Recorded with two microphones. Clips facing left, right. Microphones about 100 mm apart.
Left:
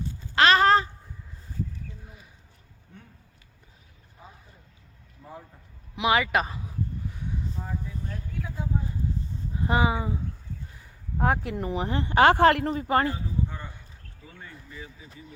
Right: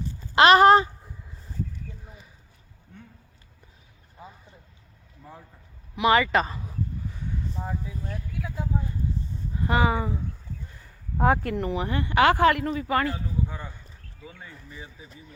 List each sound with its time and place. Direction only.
0.3 s speech: 25° right (ahead or behind)
6.0 s speech: 5° left (ahead or behind)
7.6 s speech: 5° right (ahead or behind)
9.6 s speech: 20° left (ahead or behind)
11.2 s speech: centre (ahead or behind)
11.5 s speech: 20° left (ahead or behind)
14.4 s a sound: 15° right (ahead or behind)